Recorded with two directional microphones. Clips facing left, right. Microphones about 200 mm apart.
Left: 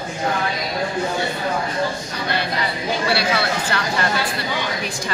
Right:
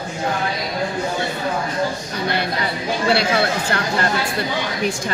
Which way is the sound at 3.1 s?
50° right (ahead or behind).